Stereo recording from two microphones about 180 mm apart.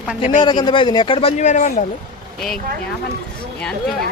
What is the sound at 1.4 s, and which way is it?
Speech, 45° left (ahead or behind).